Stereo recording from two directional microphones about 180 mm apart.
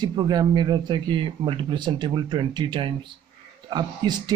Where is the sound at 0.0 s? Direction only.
25° right (ahead or behind).